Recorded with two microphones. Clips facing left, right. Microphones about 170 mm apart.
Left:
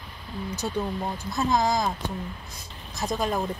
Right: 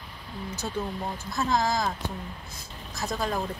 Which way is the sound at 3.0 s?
20° left (ahead or behind).